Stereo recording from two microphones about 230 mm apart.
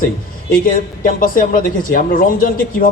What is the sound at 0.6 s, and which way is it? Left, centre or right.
A man's voice, left.